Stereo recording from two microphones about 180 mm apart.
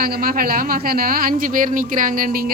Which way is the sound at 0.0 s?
55° right (ahead or behind).